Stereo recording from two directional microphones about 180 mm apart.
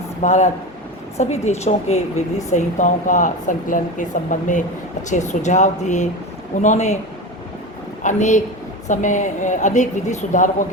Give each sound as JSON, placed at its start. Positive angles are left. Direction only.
{"t": 0.2, "sound": "a woman's voice", "side_deg": 40}
{"t": 8.0, "sound": "a woman's voice", "side_deg": 40}